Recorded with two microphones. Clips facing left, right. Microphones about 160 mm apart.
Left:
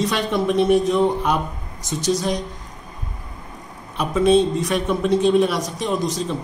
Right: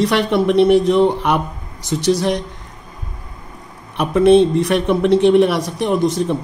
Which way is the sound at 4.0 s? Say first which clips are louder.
Right 5 dB; 60° right (ahead or behind).